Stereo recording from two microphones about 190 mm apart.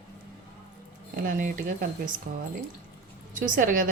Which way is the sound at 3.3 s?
45° right (ahead or behind).